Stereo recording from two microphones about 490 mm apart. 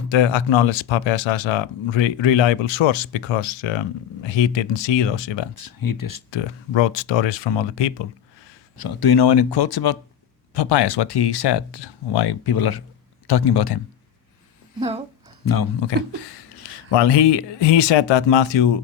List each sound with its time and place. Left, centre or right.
0.1 s speech: left
6.7 s speech: left
8.8 s speech: left
14.8 s speech: centre
15.4 s speech: left
15.8 s speech: left